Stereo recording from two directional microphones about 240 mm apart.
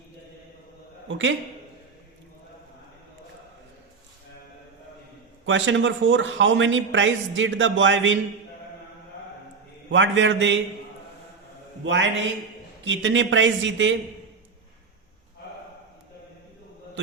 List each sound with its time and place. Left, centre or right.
1.0 s speech: right
5.5 s speech: right
9.9 s speech: right
12.8 s speech: right